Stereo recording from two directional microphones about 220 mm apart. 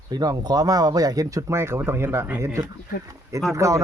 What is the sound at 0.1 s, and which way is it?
Speech, 15° right (ahead or behind).